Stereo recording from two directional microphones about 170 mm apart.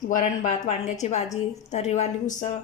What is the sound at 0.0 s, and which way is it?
A woman's voice, 50° left (ahead or behind).